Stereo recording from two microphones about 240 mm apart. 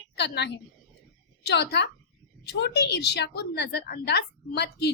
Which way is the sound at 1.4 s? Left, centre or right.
Left.